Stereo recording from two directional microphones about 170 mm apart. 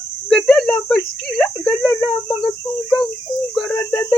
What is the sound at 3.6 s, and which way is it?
Speech, 10° left (ahead or behind).